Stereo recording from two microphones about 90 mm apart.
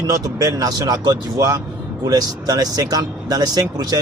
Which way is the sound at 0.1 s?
40° right (ahead or behind).